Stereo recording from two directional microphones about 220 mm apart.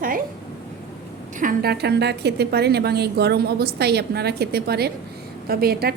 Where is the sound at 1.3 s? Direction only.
40° right (ahead or behind).